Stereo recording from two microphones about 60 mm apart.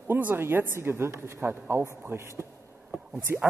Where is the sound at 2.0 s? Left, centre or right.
Right.